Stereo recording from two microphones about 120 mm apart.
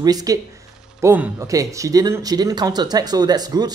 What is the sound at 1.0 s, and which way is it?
Speech, 15° right (ahead or behind).